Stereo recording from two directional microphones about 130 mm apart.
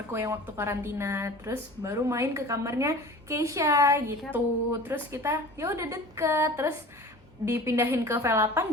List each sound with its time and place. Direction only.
0.1 s a woman's voice: 20° right (ahead or behind)